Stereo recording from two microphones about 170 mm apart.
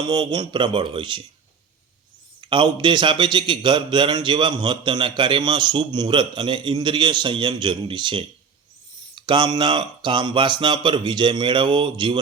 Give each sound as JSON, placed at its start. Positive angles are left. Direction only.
{"t": 0.0, "sound": "a man's voice", "side_deg": -25}
{"t": 2.4, "sound": "a man's voice", "side_deg": -30}